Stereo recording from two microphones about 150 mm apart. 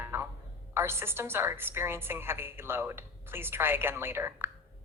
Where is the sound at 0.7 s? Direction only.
15° right (ahead or behind).